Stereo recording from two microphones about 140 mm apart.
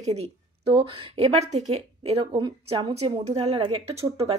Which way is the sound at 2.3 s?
35° right (ahead or behind).